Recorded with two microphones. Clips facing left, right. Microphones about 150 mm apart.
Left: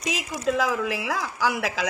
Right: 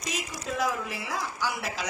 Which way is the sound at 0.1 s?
90° left.